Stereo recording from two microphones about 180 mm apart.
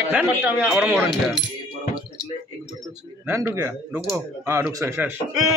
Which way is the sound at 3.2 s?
15° right (ahead or behind).